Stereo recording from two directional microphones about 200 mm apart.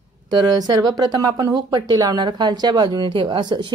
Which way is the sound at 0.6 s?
20° right (ahead or behind).